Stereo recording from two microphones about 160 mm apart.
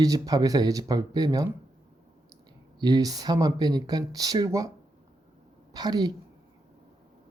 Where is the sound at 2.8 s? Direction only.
25° right (ahead or behind).